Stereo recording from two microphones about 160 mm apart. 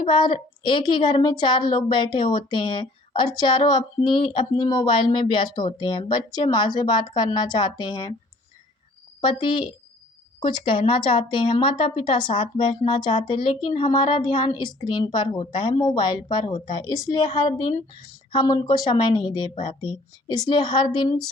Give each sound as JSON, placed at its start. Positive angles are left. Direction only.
{"t": 0.0, "sound": "a woman's voice", "side_deg": 30}
{"t": 9.2, "sound": "a woman's voice", "side_deg": 35}